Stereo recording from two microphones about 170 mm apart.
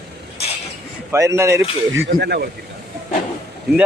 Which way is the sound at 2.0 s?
80° right.